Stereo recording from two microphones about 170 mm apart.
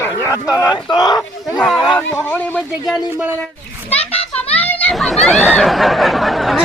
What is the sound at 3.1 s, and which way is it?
Speech, 10° right (ahead or behind).